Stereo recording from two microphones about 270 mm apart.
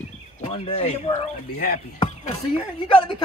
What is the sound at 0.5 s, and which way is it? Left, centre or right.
Speech, left.